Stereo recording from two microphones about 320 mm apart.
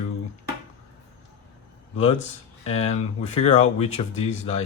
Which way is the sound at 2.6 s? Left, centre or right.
Centre.